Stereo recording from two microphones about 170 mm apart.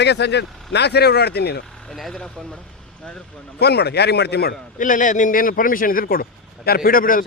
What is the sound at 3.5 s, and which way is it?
Speech, 75° left (ahead or behind).